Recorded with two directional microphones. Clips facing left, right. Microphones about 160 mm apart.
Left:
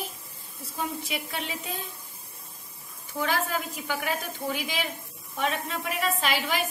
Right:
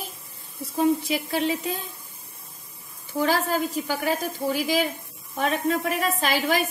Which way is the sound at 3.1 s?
35° right (ahead or behind).